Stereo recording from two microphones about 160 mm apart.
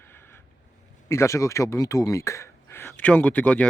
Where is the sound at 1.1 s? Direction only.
20° left (ahead or behind).